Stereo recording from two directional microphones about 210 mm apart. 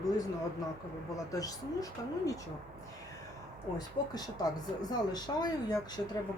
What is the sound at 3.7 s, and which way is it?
Speech, 20° left (ahead or behind).